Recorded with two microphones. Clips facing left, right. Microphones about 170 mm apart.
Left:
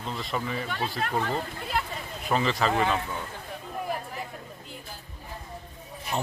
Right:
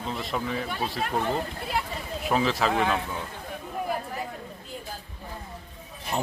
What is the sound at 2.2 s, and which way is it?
Speech, centre (ahead or behind).